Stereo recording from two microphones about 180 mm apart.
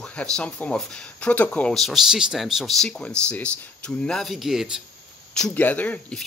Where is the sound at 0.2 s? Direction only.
5° left (ahead or behind).